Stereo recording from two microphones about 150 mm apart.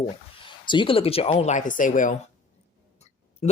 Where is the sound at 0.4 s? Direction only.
35° left (ahead or behind); by 2.1 s 60° left (ahead or behind).